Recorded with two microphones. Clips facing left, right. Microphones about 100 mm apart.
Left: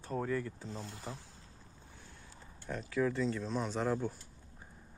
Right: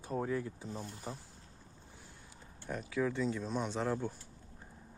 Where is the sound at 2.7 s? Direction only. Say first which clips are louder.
Left 1 dB; 5° right (ahead or behind).